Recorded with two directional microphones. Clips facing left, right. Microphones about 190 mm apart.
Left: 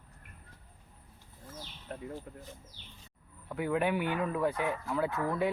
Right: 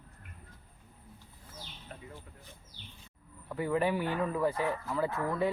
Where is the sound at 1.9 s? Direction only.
55° left (ahead or behind).